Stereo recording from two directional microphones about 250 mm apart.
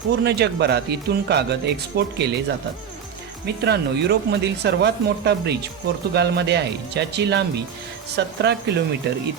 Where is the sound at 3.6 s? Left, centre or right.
Right.